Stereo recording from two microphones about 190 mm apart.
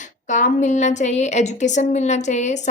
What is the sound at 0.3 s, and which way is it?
A woman's voice, 40° left (ahead or behind).